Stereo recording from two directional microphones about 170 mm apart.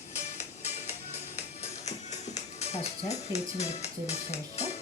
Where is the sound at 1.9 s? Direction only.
40° left (ahead or behind).